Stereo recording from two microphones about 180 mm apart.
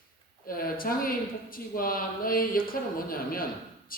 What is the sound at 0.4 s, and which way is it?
Speech, 55° left (ahead or behind).